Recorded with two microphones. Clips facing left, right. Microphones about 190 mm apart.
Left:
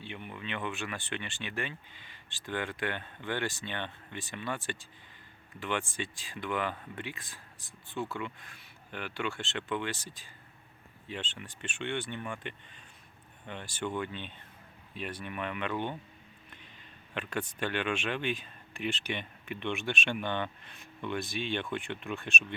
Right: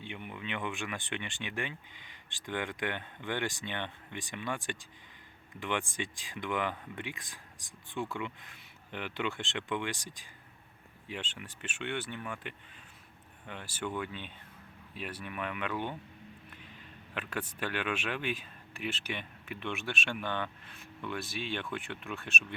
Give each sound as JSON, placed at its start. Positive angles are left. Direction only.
{"t": 0.0, "sound": "speech", "side_deg": -15}
{"t": 17.2, "sound": "speech", "side_deg": -5}